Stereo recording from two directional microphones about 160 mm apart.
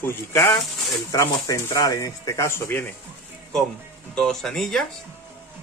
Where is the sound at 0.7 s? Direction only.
Centre (ahead or behind).